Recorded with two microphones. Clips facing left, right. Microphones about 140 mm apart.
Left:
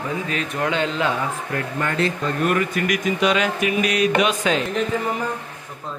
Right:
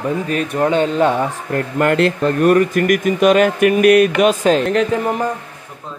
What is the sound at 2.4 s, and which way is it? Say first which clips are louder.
Speech: right 8 dB; 45° right (ahead or behind).